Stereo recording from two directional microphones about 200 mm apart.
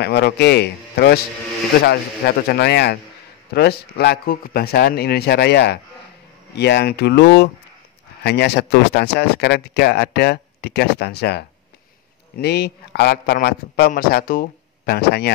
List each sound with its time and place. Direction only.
0.0 s a man's voice: 55° left (ahead or behind)